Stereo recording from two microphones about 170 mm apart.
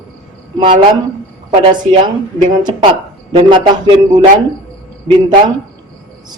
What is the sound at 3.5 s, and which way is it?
Speech, 25° right (ahead or behind).